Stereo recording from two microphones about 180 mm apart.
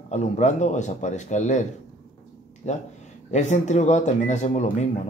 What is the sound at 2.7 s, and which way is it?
Speech, 40° left (ahead or behind).